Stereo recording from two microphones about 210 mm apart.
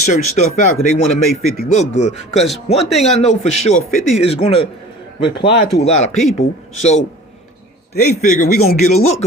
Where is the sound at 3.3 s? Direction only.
30° left (ahead or behind).